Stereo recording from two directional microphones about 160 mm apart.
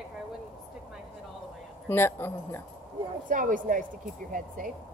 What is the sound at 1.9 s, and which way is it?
Speech, 15° left (ahead or behind).